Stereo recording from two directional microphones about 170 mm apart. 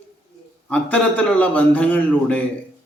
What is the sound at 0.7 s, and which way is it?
Speech, 10° left (ahead or behind).